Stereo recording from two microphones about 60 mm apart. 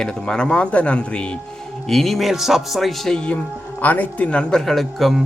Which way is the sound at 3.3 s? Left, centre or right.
Left.